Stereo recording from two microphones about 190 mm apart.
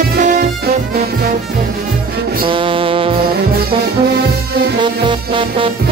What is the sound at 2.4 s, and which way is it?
Music, 25° right (ahead or behind).